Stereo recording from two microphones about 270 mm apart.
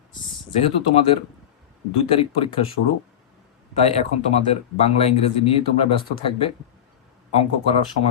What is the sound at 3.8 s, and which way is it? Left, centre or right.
Speech, left.